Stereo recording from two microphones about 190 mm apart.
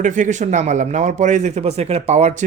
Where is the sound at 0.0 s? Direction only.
40° right (ahead or behind).